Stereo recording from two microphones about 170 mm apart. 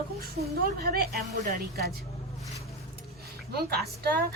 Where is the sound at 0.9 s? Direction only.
65° right (ahead or behind).